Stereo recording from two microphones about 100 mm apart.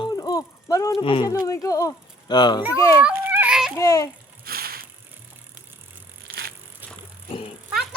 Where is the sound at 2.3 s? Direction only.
50° left (ahead or behind).